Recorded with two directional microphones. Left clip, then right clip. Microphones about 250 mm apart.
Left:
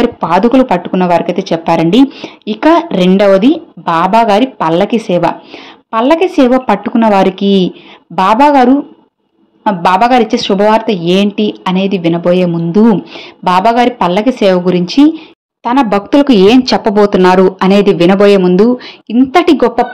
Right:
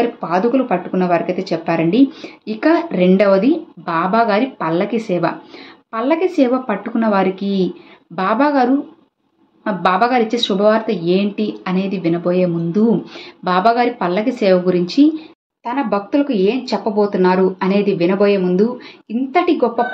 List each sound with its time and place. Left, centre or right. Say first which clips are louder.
0.2 s speech: left 8 dB; left
9.7 s speech: left 7 dB; left